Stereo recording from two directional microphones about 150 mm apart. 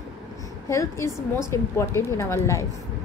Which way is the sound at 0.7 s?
20° left (ahead or behind).